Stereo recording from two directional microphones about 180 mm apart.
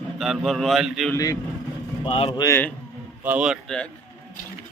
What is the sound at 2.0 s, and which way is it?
Speech, 30° left (ahead or behind).